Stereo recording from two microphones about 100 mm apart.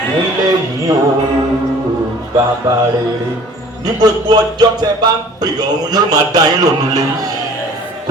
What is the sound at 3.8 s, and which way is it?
Speech, 45° right (ahead or behind).